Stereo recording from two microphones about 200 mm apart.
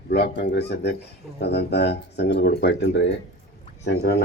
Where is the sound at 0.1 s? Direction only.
55° left (ahead or behind).